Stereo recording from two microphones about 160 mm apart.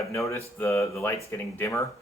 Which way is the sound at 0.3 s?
20° left (ahead or behind).